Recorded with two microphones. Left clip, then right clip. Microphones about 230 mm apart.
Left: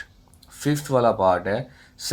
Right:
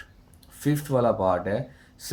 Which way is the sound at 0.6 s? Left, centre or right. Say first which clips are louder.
Left 2 dB; left.